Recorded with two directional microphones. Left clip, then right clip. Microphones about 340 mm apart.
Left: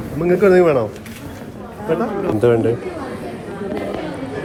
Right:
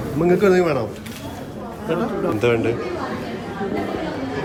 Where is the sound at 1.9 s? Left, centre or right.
Centre.